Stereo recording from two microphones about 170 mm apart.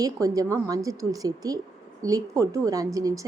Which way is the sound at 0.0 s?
20° right (ahead or behind).